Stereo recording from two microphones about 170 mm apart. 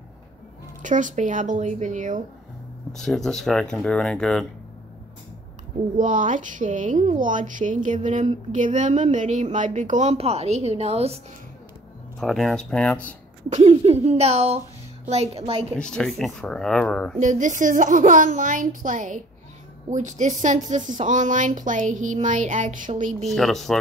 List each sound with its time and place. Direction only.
0.8 s speech: 50° right (ahead or behind)
3.0 s speech: 5° left (ahead or behind)
5.9 s speech: 50° right (ahead or behind)
12.2 s speech: centre (ahead or behind)
13.5 s speech: 40° right (ahead or behind)
15.7 s speech: 5° left (ahead or behind)
17.2 s speech: 45° right (ahead or behind)
23.2 s speech: centre (ahead or behind)